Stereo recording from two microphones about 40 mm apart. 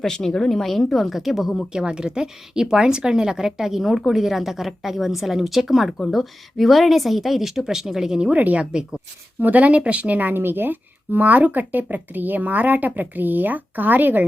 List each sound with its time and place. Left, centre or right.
0.0 s a woman's voice: centre
1.7 s a woman's voice: right
8.4 s speech: right
10.2 s speech: right